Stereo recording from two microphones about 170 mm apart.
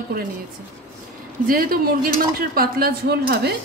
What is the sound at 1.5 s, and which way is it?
A woman's voice, 60° right (ahead or behind).